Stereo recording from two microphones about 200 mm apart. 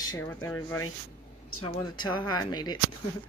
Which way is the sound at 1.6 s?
20° left (ahead or behind).